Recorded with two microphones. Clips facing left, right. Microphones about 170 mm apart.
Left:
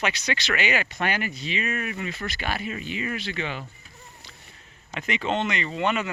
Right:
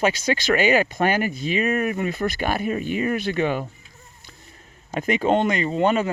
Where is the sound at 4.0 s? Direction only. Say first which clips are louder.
Left 2 dB; 85° left.